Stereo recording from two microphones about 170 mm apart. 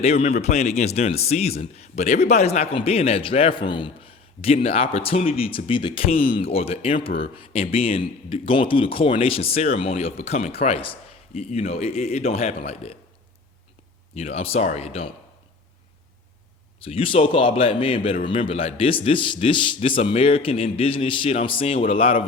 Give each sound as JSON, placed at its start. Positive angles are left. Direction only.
{"t": 0.0, "sound": "a man's voice", "side_deg": 40}
{"t": 14.2, "sound": "a man's voice", "side_deg": 35}
{"t": 16.8, "sound": "a man's voice", "side_deg": 35}